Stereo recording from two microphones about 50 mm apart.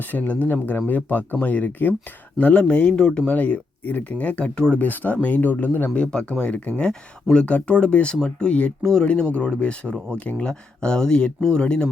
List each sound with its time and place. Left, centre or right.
0.1 s speech: left
2.4 s speech: left
3.2 s speech: left
4.5 s speech: centre
4.8 s speech: left
5.9 s speech: centre